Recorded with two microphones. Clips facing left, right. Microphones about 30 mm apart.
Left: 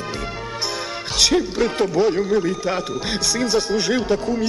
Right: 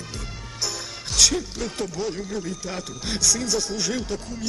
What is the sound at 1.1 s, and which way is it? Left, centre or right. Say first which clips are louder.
A man's voice: left 5 dB; left.